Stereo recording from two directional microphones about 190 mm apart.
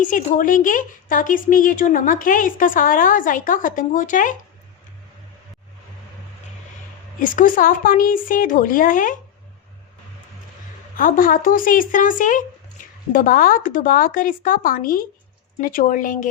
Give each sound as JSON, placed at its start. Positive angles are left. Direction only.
{"t": 0.0, "sound": "speech", "side_deg": 45}
{"t": 7.2, "sound": "speech", "side_deg": 45}
{"t": 10.9, "sound": "speech", "side_deg": 45}